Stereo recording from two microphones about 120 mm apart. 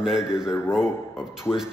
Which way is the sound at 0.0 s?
5° right (ahead or behind).